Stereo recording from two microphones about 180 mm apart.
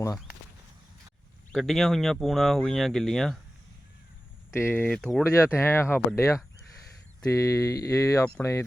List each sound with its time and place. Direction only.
1.5 s speech: centre (ahead or behind)
4.5 s speech: 10° left (ahead or behind)
5.2 s speech: 15° left (ahead or behind)